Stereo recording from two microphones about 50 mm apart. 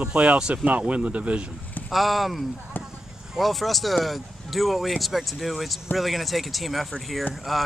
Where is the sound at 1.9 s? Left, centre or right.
Centre.